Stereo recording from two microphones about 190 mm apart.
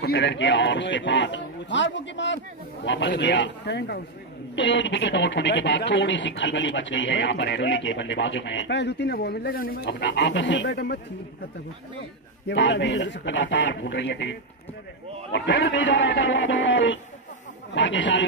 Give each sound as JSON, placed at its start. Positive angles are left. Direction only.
{"t": 0.0, "sound": "speech", "side_deg": 65}
{"t": 12.4, "sound": "speech", "side_deg": 65}
{"t": 15.3, "sound": "speech", "side_deg": 65}